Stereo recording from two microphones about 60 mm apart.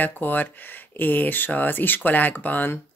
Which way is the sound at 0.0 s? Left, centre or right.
Left.